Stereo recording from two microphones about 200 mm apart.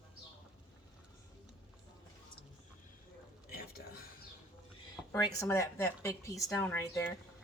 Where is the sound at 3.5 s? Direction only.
50° left (ahead or behind).